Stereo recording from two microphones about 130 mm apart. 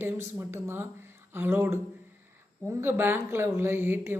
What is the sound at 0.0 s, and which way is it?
Speech, 20° right (ahead or behind).